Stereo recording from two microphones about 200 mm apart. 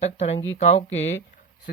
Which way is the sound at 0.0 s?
30° left (ahead or behind).